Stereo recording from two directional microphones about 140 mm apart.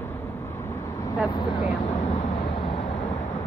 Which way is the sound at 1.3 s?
30° left (ahead or behind).